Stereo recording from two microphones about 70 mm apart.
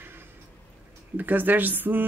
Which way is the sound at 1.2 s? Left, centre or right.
Right.